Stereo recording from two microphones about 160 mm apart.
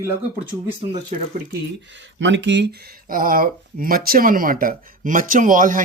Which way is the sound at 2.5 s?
80° right.